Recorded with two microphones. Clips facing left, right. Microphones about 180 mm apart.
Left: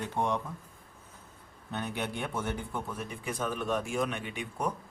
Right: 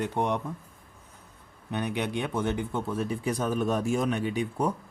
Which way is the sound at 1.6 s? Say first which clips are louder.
Right 5 dB; 15° right (ahead or behind).